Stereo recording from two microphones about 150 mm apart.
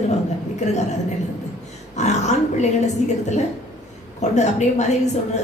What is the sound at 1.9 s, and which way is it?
A woman's voice, 50° left (ahead or behind).